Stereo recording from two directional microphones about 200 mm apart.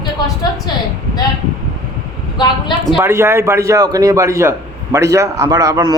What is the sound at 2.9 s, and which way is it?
A man's voice, 15° right (ahead or behind).